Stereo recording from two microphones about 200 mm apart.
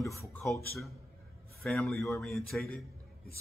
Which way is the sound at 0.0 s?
15° left (ahead or behind).